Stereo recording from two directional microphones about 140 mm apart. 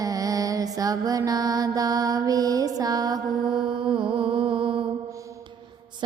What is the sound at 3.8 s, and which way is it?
Music, 35° right (ahead or behind).